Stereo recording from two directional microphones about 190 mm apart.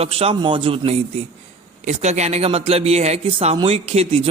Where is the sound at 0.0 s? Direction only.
30° right (ahead or behind).